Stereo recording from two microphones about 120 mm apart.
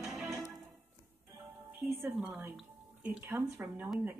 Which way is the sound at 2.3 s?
15° right (ahead or behind).